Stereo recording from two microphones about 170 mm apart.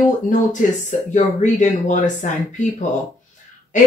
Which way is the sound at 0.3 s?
50° left (ahead or behind).